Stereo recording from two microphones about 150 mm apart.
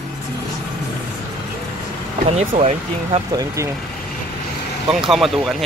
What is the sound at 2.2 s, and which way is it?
Speech, 45° right (ahead or behind).